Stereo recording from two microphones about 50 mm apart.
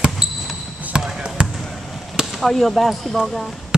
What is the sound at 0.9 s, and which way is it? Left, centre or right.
Basketball bounce, centre.